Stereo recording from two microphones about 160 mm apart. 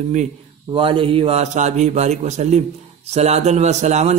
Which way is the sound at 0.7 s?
35° right (ahead or behind).